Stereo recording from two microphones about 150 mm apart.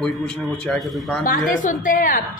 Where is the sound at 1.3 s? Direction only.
65° left (ahead or behind).